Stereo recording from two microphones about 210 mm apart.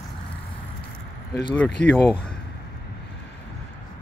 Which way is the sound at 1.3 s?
20° left (ahead or behind).